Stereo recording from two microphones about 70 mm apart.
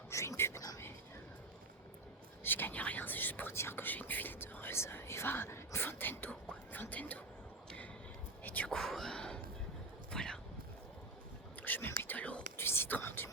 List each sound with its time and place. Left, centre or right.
0.1 s whispering: left
2.4 s speech: left
8.4 s speech: left
8.7 s speech: centre
10.1 s a sound: centre
11.6 s whispering: left